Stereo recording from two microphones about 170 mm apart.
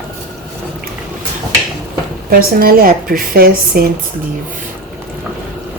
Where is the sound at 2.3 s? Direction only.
55° right (ahead or behind).